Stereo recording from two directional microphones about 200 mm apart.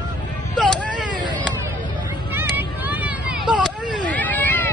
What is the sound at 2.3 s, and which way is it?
Vehicle, 10° right (ahead or behind).